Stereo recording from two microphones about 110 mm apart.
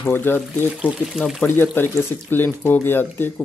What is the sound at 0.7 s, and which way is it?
Speech, 5° right (ahead or behind).